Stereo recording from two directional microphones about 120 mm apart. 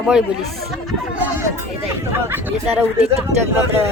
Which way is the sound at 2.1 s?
15° right (ahead or behind).